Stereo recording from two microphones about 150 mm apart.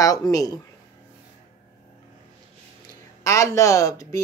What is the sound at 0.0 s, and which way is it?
Speech, 25° left (ahead or behind).